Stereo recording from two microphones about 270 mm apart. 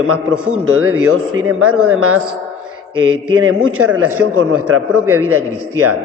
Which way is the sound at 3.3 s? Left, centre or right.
Right.